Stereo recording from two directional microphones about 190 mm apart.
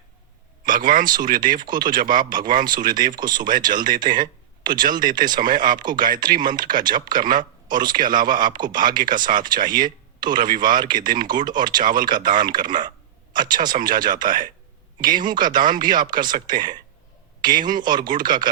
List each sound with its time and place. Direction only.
0.6 s speech: 45° right (ahead or behind)
1.4 s speech: 25° right (ahead or behind)
2.3 s speech: 45° right (ahead or behind)
2.6 s speech: 20° right (ahead or behind)